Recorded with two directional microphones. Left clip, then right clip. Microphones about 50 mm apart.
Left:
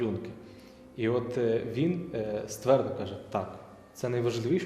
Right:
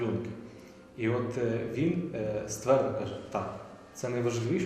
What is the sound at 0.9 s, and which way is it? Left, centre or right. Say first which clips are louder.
A man's voice: left 2 dB; centre.